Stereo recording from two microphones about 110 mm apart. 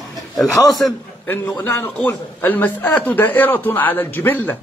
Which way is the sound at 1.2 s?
20° left (ahead or behind).